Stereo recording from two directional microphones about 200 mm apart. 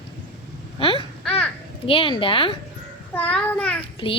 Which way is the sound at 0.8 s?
25° left (ahead or behind).